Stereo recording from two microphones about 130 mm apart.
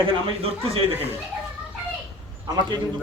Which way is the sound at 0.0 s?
45° right (ahead or behind).